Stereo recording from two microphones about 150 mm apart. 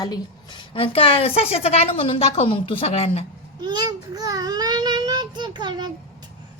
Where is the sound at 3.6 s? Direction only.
25° right (ahead or behind).